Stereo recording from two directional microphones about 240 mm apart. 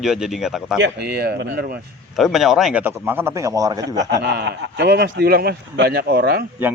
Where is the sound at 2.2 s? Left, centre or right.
Centre.